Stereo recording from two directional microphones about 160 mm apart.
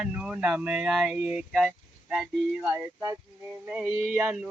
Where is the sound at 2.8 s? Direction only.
20° right (ahead or behind).